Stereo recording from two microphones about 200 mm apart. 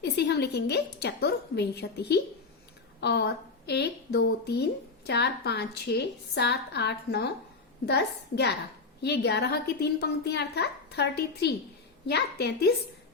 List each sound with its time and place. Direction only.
0.0 s a woman's voice: 55° left (ahead or behind)